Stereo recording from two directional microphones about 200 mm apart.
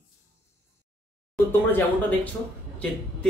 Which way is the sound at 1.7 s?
10° left (ahead or behind).